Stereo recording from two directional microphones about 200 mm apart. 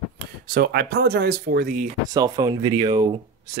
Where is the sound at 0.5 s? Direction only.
50° right (ahead or behind).